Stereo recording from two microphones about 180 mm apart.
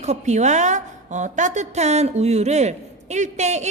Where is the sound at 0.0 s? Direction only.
40° right (ahead or behind).